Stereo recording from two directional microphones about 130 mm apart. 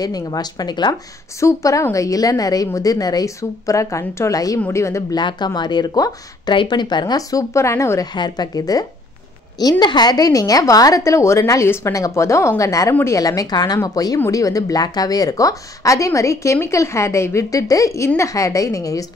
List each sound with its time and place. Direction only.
0.0 s a woman's voice: 30° left (ahead or behind)
5.2 s speech: 35° left (ahead or behind)
8.1 s a woman's voice: 35° left (ahead or behind)